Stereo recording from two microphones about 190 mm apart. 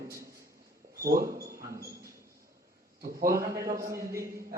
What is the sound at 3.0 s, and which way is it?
Speech, 50° right (ahead or behind).